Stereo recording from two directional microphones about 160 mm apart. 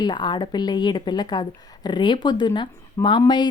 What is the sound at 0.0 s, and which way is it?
Speech, 30° left (ahead or behind).